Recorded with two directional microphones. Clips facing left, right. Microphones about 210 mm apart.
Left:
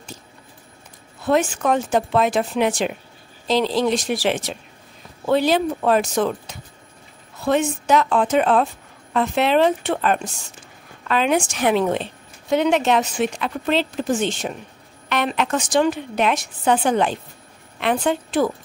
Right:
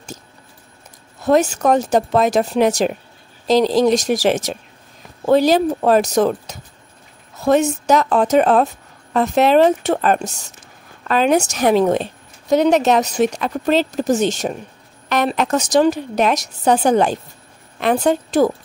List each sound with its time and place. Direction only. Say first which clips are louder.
1.2 s a woman's voice: right 4 dB; 40° right (ahead or behind)